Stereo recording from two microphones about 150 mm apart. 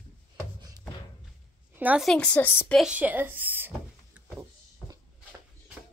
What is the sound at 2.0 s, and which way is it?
Speech, 5° left (ahead or behind).